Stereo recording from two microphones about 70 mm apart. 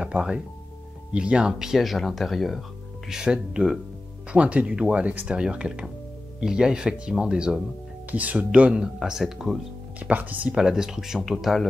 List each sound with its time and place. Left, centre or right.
0.0 s speech: centre
1.5 s speech: centre
9.9 s speech: right
10.5 s speech: centre